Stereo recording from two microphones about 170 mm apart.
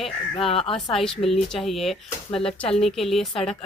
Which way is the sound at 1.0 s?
Centre (ahead or behind).